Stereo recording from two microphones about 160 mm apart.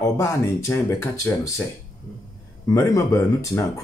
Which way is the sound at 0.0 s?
20° left (ahead or behind).